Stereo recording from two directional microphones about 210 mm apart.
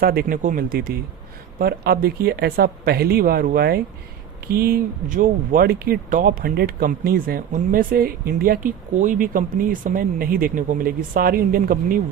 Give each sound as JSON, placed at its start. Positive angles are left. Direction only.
{"t": 0.0, "sound": "speech", "side_deg": -45}